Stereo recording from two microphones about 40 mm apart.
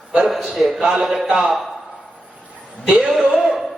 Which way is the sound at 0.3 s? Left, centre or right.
Centre.